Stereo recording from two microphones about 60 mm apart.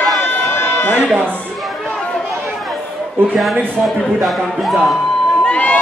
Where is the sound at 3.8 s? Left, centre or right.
Centre.